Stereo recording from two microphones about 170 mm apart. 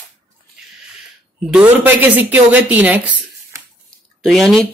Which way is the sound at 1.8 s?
10° right (ahead or behind).